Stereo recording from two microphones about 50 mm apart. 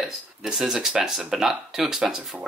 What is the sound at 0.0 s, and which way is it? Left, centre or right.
Speech, centre.